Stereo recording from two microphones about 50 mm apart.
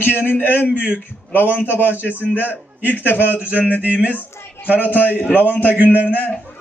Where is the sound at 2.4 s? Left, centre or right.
Left.